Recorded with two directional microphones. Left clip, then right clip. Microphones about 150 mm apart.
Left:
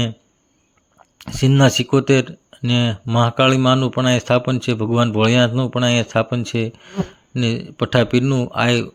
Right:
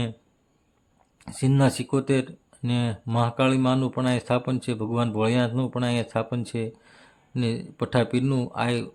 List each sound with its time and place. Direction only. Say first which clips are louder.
1.2 s a man's voice: left 8 dB; 30° left (ahead or behind)